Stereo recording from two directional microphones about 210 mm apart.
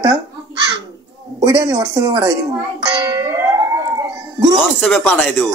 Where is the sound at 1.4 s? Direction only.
20° right (ahead or behind).